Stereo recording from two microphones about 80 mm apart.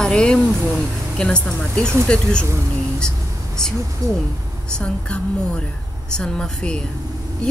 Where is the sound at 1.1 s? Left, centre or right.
Centre.